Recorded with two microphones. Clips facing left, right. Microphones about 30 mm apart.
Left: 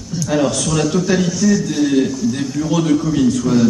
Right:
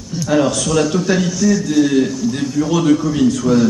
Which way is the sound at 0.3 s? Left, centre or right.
Centre.